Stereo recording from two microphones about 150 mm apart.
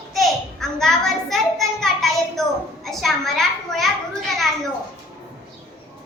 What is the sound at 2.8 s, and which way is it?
A child's voice, centre (ahead or behind).